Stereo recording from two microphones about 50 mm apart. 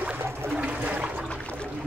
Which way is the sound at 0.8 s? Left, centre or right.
Right.